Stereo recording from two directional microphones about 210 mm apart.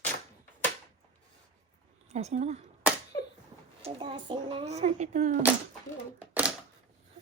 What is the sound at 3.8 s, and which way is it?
Speech, 25° right (ahead or behind).